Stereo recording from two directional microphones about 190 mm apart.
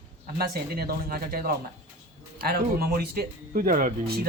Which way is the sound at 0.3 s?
55° right (ahead or behind).